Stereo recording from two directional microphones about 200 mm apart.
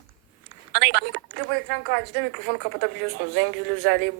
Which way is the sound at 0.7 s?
60° right (ahead or behind).